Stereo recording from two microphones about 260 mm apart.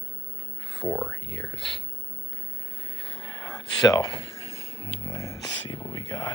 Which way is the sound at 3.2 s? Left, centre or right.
Centre.